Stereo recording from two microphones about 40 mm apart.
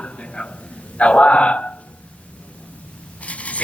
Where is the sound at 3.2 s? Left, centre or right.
Left.